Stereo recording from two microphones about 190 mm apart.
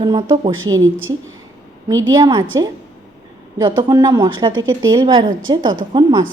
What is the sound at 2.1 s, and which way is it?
Speech, 20° right (ahead or behind).